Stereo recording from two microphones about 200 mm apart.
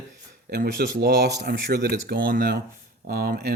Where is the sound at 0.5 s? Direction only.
50° right (ahead or behind).